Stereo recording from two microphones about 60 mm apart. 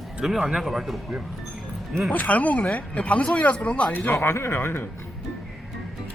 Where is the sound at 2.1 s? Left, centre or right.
Left.